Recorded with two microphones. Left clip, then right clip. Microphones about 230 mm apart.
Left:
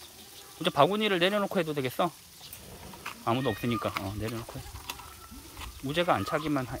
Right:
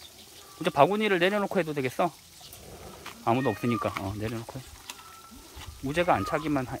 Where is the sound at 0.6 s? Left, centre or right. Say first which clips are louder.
Right 2 dB; centre.